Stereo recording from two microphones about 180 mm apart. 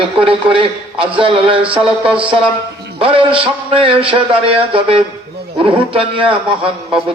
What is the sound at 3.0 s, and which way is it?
A man's voice, 30° right (ahead or behind).